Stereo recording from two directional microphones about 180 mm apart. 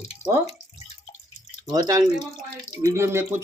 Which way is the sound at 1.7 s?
20° right (ahead or behind).